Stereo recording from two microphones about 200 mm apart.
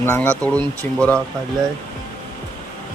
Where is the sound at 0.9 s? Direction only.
35° right (ahead or behind).